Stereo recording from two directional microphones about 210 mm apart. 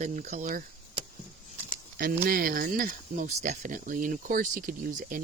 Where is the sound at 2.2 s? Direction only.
45° right (ahead or behind).